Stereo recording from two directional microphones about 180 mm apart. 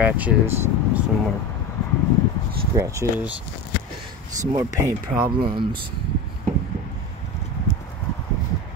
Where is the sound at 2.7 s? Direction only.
15° right (ahead or behind).